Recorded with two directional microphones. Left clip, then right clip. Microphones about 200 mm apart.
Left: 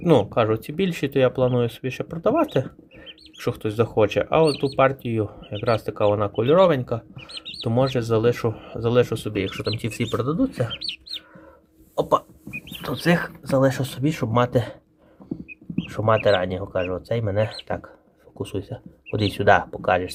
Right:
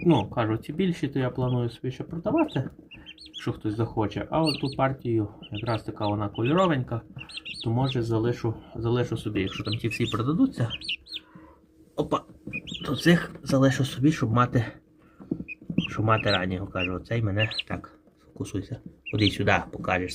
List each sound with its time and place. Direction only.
0.0 s speech: 35° left (ahead or behind)
7.6 s speech: 40° left (ahead or behind); by 10.9 s 5° left (ahead or behind)
11.9 s speech: 10° left (ahead or behind)
15.9 s speech: 15° left (ahead or behind)